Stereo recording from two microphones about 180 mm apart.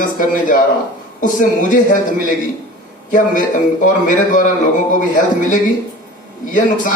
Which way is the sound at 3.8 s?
45° left (ahead or behind).